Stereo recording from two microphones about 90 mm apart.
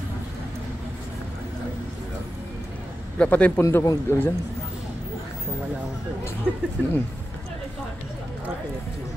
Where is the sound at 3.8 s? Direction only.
40° left (ahead or behind).